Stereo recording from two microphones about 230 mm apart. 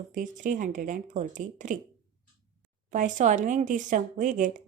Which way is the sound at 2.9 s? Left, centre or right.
Right.